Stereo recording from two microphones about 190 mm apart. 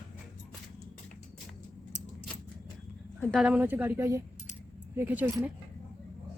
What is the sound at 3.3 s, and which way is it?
A woman's voice, 5° right (ahead or behind).